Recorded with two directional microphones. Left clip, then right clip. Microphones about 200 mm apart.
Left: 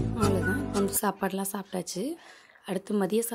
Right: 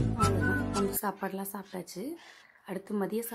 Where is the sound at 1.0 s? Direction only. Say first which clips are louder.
Left 5 dB; 25° left (ahead or behind).